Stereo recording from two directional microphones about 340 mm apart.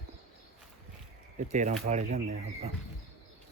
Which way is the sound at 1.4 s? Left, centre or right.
Right.